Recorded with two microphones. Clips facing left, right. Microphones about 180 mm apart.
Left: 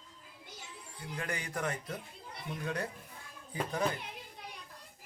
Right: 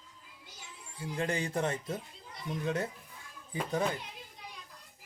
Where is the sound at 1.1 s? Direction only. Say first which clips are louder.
Right 6 dB; 25° right (ahead or behind).